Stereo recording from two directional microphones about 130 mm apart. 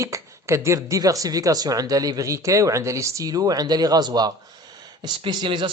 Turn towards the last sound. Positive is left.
turn(degrees=-40)  # may be behind; listen again after turning